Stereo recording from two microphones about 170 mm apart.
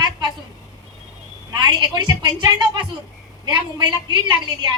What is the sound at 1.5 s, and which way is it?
A woman's voice, 25° right (ahead or behind).